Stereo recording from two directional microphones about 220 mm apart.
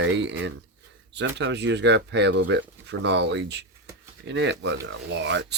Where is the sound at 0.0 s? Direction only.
55° right (ahead or behind).